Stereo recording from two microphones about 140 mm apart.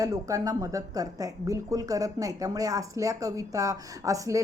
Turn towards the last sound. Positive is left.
turn(degrees=-25)  # may be behind; listen again after turning